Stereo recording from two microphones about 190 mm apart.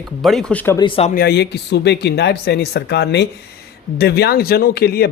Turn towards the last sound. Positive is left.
turn(degrees=55)  # may be behind; listen again after turning